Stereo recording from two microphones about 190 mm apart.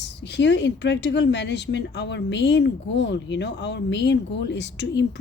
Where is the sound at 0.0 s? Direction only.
65° left (ahead or behind).